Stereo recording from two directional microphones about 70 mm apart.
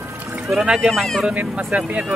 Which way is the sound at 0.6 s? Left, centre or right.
Centre.